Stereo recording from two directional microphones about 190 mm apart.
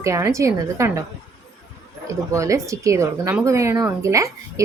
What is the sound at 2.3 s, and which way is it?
Speech, 15° right (ahead or behind).